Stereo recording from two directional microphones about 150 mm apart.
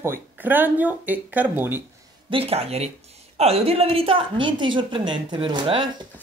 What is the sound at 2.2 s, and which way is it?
A woman's voice, 40° right (ahead or behind).